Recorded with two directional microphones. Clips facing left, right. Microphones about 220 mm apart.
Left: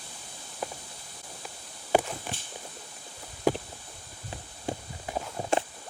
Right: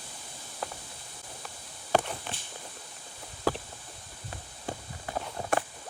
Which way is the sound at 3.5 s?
15° left (ahead or behind).